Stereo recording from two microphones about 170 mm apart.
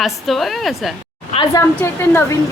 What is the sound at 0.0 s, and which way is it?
Speech, centre (ahead or behind).